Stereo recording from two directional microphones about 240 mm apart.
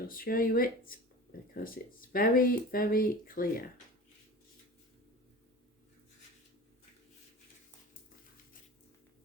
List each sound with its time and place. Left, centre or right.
0.1 s speech: left